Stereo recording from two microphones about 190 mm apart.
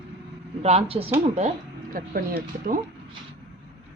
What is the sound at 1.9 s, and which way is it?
Speech, 50° right (ahead or behind).